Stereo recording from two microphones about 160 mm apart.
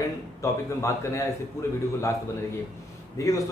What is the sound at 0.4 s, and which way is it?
Speech, 20° left (ahead or behind).